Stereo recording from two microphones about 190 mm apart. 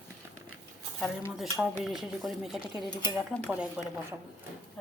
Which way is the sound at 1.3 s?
5° right (ahead or behind).